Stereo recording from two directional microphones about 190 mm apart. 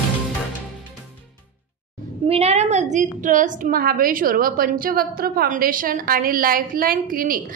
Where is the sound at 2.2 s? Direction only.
30° right (ahead or behind).